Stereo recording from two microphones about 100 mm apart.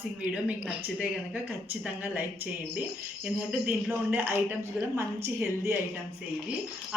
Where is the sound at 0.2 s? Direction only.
10° right (ahead or behind).